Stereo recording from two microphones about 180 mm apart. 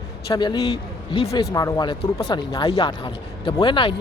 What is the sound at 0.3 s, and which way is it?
Speech, 25° left (ahead or behind).